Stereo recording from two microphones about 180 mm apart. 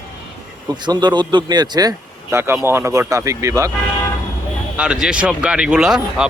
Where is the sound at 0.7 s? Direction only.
25° right (ahead or behind).